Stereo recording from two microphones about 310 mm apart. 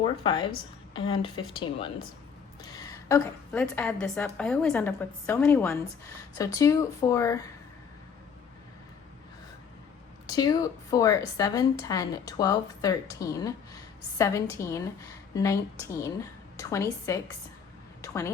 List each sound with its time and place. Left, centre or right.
0.0 s a woman's voice: centre
10.2 s a woman's voice: centre
18.0 s a sound: centre